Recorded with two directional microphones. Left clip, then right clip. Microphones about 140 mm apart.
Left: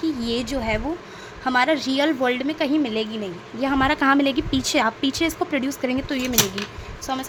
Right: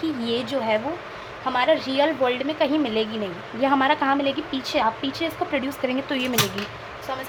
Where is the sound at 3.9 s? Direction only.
55° left (ahead or behind).